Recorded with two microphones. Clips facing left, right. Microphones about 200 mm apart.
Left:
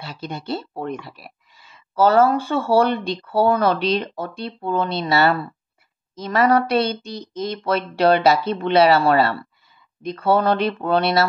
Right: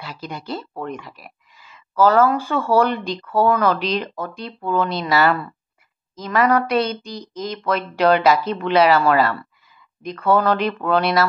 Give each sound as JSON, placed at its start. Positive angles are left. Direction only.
{"t": 0.0, "sound": "speech", "side_deg": 30}